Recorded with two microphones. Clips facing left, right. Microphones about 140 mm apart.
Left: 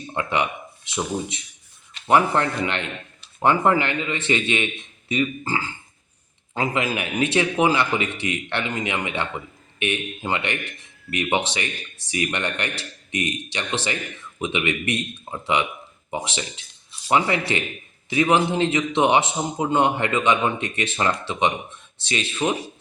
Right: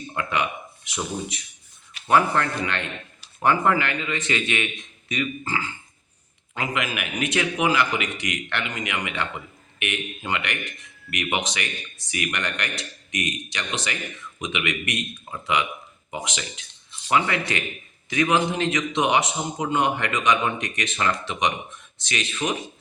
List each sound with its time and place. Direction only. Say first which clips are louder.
0.1 s speech: left 3 dB; 25° left (ahead or behind)
2.0 s a man's voice: left 2 dB; 25° left (ahead or behind)